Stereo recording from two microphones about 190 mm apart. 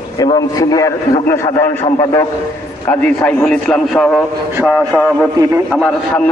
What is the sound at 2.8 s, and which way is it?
A man's voice, 5° left (ahead or behind).